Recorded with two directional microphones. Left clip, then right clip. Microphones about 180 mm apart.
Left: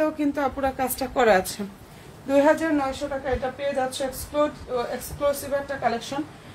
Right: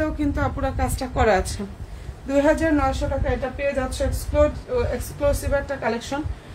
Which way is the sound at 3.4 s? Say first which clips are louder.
Right 1 dB; 20° right (ahead or behind).